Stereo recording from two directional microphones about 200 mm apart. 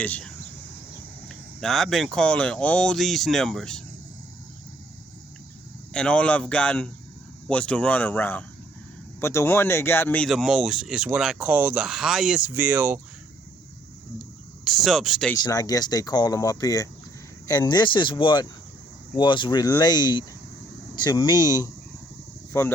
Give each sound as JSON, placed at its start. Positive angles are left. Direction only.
{"t": 0.0, "sound": "speech", "side_deg": 5}
{"t": 5.9, "sound": "speech", "side_deg": 5}
{"t": 14.6, "sound": "speech", "side_deg": 0}
{"t": 15.4, "sound": "speech", "side_deg": 20}